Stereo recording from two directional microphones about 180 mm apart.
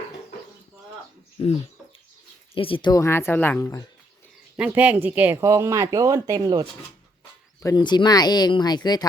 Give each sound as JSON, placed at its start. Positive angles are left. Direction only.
{"t": 1.4, "sound": "speech", "side_deg": 30}
{"t": 2.6, "sound": "a woman's voice", "side_deg": 30}
{"t": 4.5, "sound": "speech", "side_deg": -10}
{"t": 7.6, "sound": "speech", "side_deg": 20}